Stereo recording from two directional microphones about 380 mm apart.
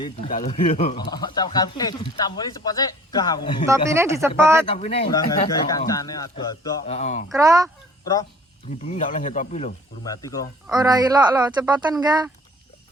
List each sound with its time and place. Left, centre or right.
0.0 s speech: centre
3.7 s speech: centre
4.6 s speech: centre
7.3 s speech: centre
9.0 s speech: centre
10.7 s speech: centre